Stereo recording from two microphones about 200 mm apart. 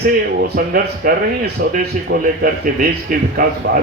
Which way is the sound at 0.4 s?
45° right (ahead or behind).